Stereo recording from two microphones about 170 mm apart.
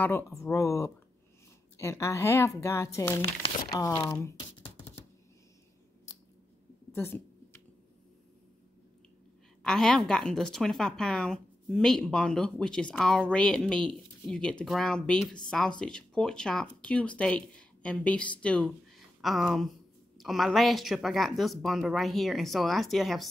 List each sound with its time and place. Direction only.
0.4 s speech: 20° left (ahead or behind)
3.7 s crumpling: 15° left (ahead or behind)
6.9 s a sound: 15° left (ahead or behind)
9.6 s a woman's voice: 5° left (ahead or behind)